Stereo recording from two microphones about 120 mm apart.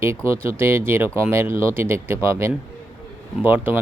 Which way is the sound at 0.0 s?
20° right (ahead or behind).